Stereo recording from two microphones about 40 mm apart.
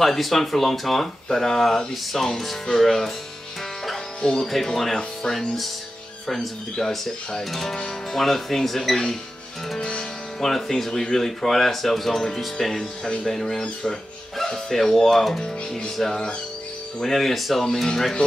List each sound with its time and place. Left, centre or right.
0.0 s speech: centre
4.2 s speech: centre
9.8 s music: left
10.4 s speech: centre